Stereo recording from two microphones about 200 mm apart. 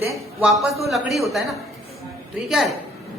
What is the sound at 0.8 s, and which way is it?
A woman's voice, centre (ahead or behind).